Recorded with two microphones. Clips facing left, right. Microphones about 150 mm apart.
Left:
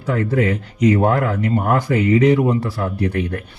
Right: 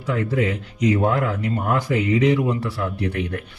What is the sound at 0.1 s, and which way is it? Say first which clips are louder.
A man's voice: left 4 dB; 45° left (ahead or behind).